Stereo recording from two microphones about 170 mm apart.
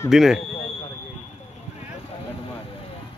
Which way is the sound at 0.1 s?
Centre (ahead or behind).